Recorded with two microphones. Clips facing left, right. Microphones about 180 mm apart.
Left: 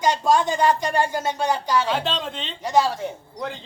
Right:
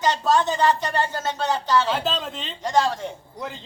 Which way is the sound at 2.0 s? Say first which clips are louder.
Even; centre (ahead or behind).